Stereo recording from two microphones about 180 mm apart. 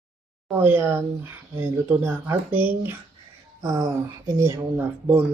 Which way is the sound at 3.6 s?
20° right (ahead or behind).